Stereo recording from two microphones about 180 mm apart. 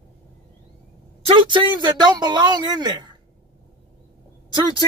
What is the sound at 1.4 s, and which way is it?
Speech, 25° right (ahead or behind).